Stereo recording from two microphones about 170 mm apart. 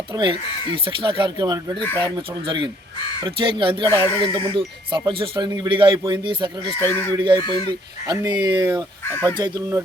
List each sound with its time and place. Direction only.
0.1 s speech: 30° right (ahead or behind)
6.8 s speech: 10° left (ahead or behind)
7.2 s speech: 25° right (ahead or behind)